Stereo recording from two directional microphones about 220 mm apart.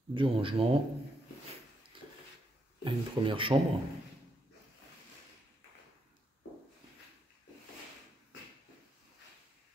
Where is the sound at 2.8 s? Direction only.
25° right (ahead or behind).